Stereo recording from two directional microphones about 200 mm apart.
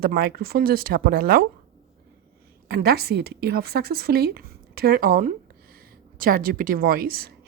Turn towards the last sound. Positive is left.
turn(degrees=-50)  # may be behind; listen again after turning